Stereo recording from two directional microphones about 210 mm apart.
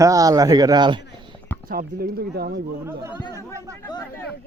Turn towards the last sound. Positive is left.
turn(degrees=20)  # may be behind; listen again after turning